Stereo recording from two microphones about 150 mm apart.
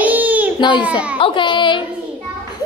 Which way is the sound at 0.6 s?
30° left (ahead or behind).